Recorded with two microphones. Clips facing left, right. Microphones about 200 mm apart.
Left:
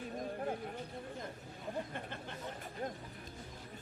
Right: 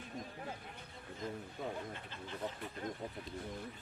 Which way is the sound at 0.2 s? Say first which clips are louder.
Left 8 dB; 50° left (ahead or behind).